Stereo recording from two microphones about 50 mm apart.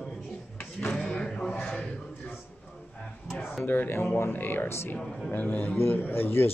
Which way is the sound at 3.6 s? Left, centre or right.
Left.